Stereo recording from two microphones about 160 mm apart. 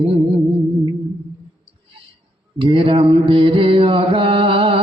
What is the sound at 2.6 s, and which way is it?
Mantra, 35° right (ahead or behind).